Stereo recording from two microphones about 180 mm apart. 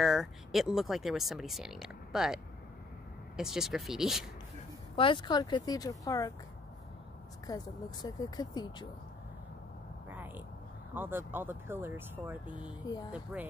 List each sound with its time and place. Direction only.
0.0 s speech: centre (ahead or behind)
4.9 s speech: 25° left (ahead or behind)
7.4 s speech: 20° left (ahead or behind)
10.0 s vehicle: 10° right (ahead or behind)
11.0 s speech: 10° right (ahead or behind)
12.8 s speech: 20° left (ahead or behind)
13.1 s speech: 5° right (ahead or behind)